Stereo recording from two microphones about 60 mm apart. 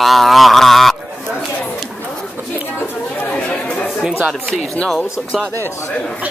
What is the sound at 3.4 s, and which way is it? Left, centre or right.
Chatter, left.